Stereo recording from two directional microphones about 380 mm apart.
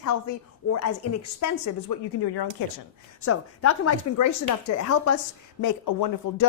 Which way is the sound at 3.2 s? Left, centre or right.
Left.